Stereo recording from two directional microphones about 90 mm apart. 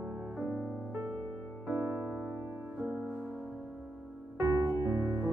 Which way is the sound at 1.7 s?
20° right (ahead or behind).